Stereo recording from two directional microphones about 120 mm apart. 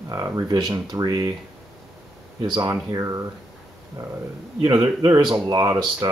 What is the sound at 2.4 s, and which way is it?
Speech, 35° right (ahead or behind).